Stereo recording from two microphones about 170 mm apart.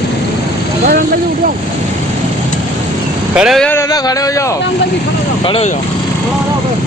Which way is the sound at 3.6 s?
20° left (ahead or behind).